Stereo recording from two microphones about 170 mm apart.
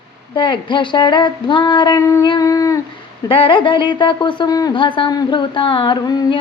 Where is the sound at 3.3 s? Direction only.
30° left (ahead or behind).